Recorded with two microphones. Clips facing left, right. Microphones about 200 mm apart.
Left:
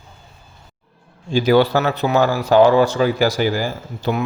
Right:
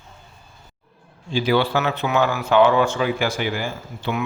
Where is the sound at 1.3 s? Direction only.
45° left (ahead or behind).